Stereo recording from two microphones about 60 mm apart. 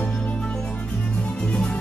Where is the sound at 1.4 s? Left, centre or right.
Centre.